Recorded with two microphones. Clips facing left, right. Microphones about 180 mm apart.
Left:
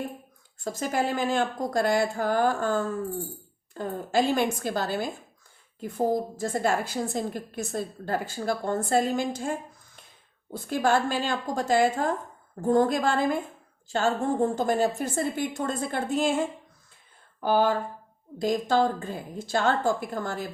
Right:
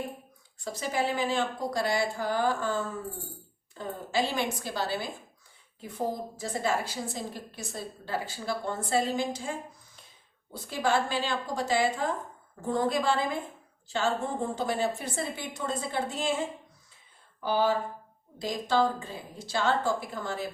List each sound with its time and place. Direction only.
0.6 s a woman's voice: 50° left (ahead or behind)
10.5 s a woman's voice: 50° left (ahead or behind)
17.4 s a woman's voice: 50° left (ahead or behind)